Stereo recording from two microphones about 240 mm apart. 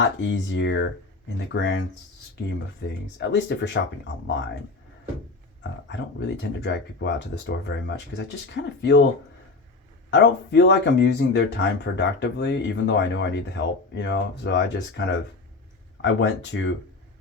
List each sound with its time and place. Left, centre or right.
0.0 s speech: left
2.8 s speech: left
5.9 s speech: left
10.1 s speech: left